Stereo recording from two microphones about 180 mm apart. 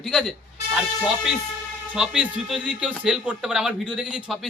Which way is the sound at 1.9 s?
5° right (ahead or behind).